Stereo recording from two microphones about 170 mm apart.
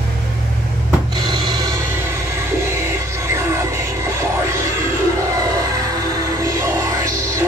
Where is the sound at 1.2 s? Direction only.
25° right (ahead or behind).